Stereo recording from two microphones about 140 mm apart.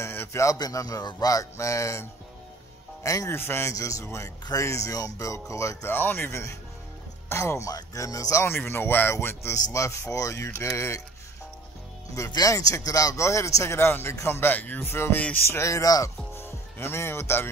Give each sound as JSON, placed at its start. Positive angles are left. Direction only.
{"t": 0.0, "sound": "speech", "side_deg": 15}
{"t": 12.2, "sound": "speech", "side_deg": 25}